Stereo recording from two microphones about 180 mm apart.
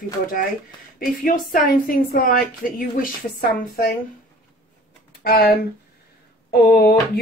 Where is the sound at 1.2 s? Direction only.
50° left (ahead or behind).